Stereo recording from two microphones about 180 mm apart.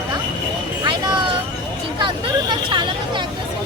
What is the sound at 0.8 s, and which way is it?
Vehicle, 25° right (ahead or behind).